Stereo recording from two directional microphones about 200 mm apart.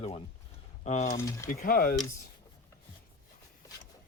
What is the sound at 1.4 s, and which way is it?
Speech, 45° left (ahead or behind).